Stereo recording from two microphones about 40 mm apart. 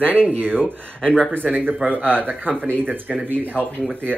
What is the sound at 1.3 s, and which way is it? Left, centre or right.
Speech, right.